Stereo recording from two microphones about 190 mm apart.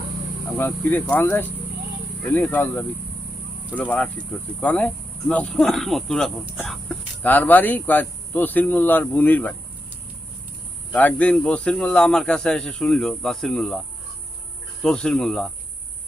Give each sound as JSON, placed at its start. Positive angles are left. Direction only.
{"t": 0.5, "sound": "speech", "side_deg": 10}
{"t": 10.9, "sound": "speech", "side_deg": 5}